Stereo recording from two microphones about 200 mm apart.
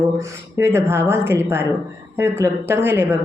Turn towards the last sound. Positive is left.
turn(degrees=-10)  # may be behind; listen again after turning